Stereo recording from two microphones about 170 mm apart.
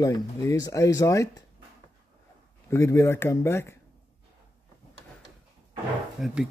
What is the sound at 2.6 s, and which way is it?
Speech, 15° left (ahead or behind).